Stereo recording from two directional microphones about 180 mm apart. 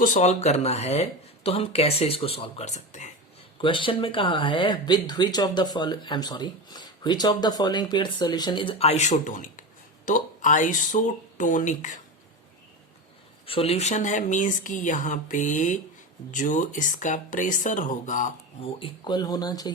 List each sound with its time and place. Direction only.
0.0 s speech: 40° left (ahead or behind)
3.6 s speech: 30° left (ahead or behind); by 11.9 s 45° left (ahead or behind)
13.4 s speech: 30° left (ahead or behind)
18.6 s speech: 30° left (ahead or behind)